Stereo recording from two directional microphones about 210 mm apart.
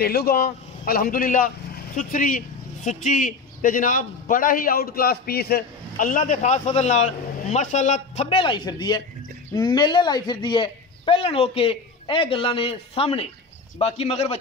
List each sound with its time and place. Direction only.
0.0 s a man's voice: 50° left (ahead or behind); by 14.4 s 30° left (ahead or behind)